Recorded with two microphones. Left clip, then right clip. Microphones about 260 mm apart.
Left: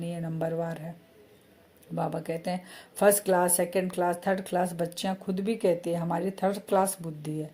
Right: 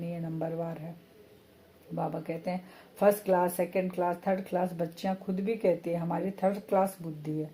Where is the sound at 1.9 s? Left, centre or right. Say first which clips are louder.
Left 3 dB; left.